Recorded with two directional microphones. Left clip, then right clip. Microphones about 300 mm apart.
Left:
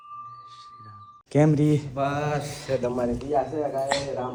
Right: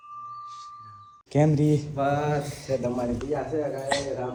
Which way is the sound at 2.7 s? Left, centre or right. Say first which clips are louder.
Left 1 dB; left.